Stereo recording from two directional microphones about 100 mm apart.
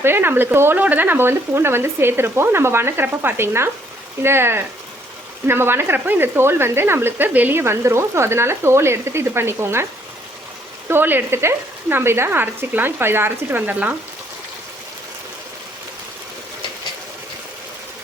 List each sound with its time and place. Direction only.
0.0 s speech: 20° right (ahead or behind)
10.8 s speech: 20° right (ahead or behind)